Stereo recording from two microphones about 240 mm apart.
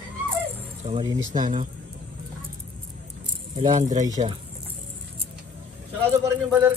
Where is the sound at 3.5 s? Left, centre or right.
Right.